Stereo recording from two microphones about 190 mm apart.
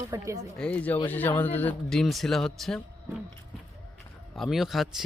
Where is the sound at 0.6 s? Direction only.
5° left (ahead or behind).